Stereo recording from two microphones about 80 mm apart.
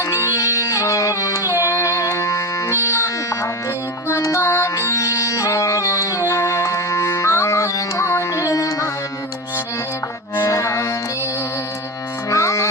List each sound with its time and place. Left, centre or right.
0.0 s music: left
10.3 s music: left
12.3 s music: left